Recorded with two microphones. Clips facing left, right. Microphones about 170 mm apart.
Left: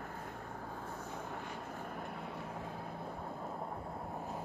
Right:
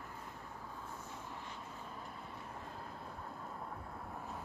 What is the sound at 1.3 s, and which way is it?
Vehicle, 60° left (ahead or behind).